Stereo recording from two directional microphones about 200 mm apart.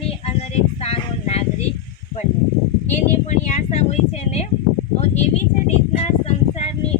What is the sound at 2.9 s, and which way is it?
Speech, 35° left (ahead or behind).